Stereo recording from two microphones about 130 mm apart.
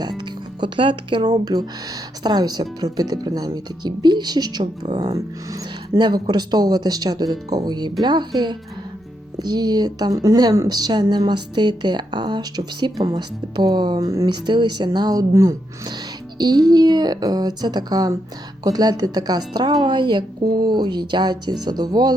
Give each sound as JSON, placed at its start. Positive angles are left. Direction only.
{"t": 0.2, "sound": "speech", "side_deg": -35}